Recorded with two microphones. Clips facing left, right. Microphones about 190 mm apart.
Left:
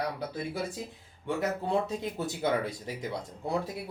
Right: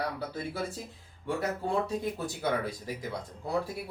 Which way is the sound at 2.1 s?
20° left (ahead or behind).